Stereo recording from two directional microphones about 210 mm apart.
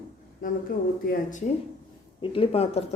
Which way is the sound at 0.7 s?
45° left (ahead or behind).